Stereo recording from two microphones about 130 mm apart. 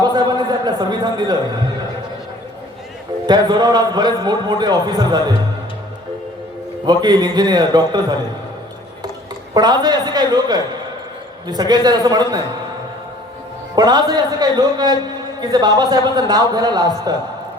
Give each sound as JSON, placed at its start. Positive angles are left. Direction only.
{"t": 0.0, "sound": "a sound", "side_deg": -30}
{"t": 3.2, "sound": "a man's voice", "side_deg": -35}
{"t": 6.8, "sound": "a man's voice", "side_deg": -35}
{"t": 9.6, "sound": "a man's voice", "side_deg": -30}
{"t": 13.7, "sound": "a man's voice", "side_deg": -30}